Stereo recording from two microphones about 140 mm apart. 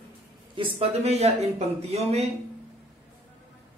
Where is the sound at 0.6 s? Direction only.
45° right (ahead or behind).